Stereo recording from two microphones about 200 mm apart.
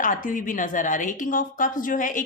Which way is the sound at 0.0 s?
40° left (ahead or behind).